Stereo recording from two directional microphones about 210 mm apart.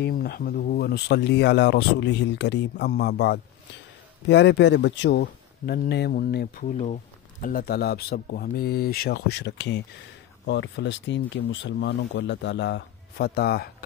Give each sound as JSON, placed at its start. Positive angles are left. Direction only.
{"t": 0.0, "sound": "speech", "side_deg": 45}